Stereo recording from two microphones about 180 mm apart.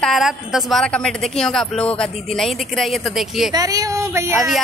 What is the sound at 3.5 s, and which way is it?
Speech, 20° right (ahead or behind).